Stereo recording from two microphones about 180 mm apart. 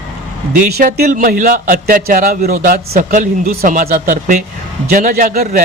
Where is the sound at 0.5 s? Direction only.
50° right (ahead or behind).